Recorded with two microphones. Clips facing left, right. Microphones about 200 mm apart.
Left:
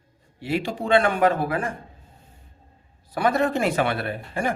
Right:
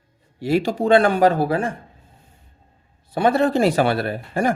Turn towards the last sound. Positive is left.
turn(degrees=-40)  # may be behind; listen again after turning